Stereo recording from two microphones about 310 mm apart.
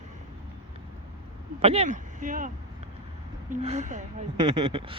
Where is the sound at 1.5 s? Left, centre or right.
Centre.